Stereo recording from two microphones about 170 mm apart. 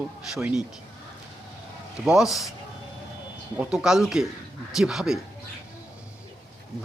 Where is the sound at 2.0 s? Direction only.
5° right (ahead or behind).